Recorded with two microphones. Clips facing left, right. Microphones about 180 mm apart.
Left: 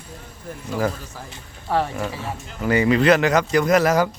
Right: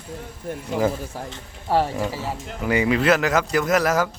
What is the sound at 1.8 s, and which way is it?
Speech, 5° right (ahead or behind).